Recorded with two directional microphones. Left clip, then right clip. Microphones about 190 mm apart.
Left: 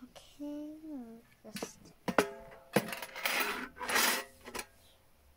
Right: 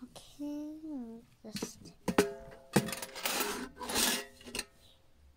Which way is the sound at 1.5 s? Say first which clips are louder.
Right 1 dB; 45° right (ahead or behind).